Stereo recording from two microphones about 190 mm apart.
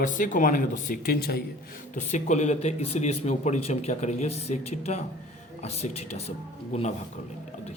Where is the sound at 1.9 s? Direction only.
40° left (ahead or behind).